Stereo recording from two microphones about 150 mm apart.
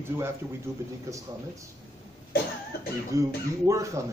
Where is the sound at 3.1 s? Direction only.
20° right (ahead or behind).